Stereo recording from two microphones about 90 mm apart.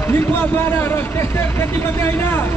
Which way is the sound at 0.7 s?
25° left (ahead or behind).